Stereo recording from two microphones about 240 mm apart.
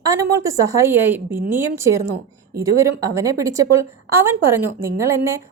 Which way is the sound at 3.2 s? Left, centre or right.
Centre.